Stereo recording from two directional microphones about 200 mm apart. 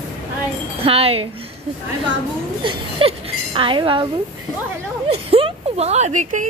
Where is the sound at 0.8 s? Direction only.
30° right (ahead or behind).